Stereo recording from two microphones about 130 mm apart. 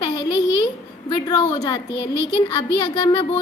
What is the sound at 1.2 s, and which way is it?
A woman's voice, 35° left (ahead or behind).